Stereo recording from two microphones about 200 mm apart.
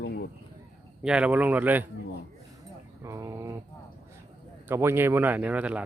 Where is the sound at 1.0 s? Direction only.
5° right (ahead or behind).